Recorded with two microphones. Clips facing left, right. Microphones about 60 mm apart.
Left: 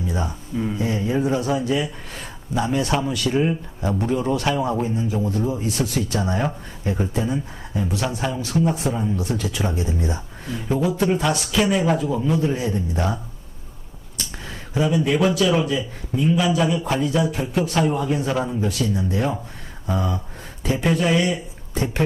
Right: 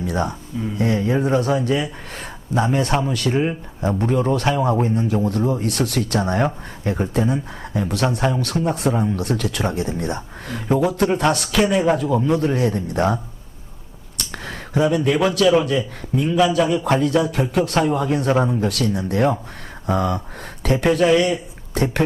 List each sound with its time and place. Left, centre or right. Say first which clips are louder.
0.0 s speech: right 4 dB; right
3.3 s speech: even; right
3.9 s speech: right 2 dB; right
14.2 s a sound: right 3 dB; right
15.4 s a man's voice: right 4 dB; centre
16.7 s speech: right 4 dB; right
17.3 s speech: right 3 dB; right
17.9 s speech: right 2 dB; right
18.3 s speech: right 4 dB; right
21.1 s a man's voice: right 4 dB; centre
21.8 s speech: right 4 dB; right